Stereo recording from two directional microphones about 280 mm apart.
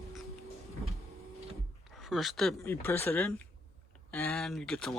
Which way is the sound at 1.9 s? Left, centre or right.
Centre.